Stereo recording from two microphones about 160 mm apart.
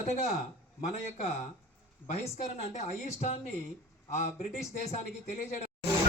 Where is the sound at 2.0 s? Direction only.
45° left (ahead or behind).